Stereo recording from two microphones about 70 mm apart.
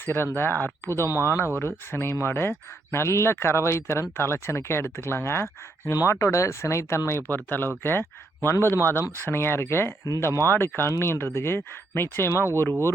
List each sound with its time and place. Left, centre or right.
0.0 s speech: left
5.9 s speech: left